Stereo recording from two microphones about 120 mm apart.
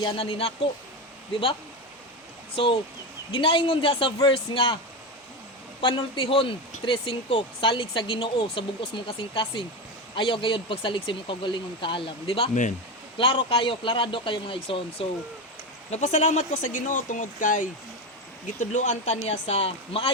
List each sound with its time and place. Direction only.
0.2 s a man's voice: 55° left (ahead or behind)
2.6 s speech: 45° left (ahead or behind)
5.8 s speech: 40° left (ahead or behind)
15.9 s speech: 70° left (ahead or behind); by 20.1 s 55° left (ahead or behind)